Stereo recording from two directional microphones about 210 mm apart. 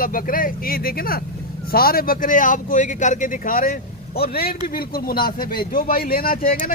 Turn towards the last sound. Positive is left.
turn(degrees=45)  # may be behind; listen again after turning